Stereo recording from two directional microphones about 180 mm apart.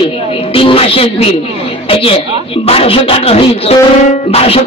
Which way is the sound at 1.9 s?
30° left (ahead or behind).